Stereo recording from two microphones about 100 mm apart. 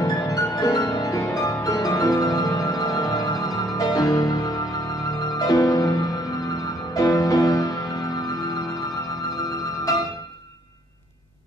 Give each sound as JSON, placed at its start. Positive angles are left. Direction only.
{"t": 0.0, "sound": "music", "side_deg": 40}